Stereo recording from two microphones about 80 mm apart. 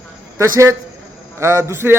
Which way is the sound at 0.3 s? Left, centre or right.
Right.